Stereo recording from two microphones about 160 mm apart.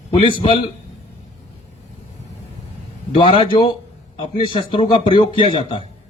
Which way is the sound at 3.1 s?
30° left (ahead or behind).